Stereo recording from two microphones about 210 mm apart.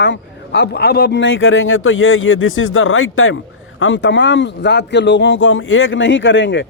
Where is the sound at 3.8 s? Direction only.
60° left (ahead or behind).